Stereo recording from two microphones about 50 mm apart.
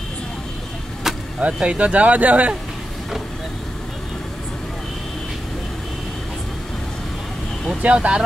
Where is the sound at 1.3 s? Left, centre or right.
Right.